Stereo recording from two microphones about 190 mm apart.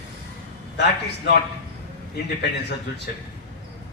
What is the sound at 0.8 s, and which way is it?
Speech, 65° left (ahead or behind).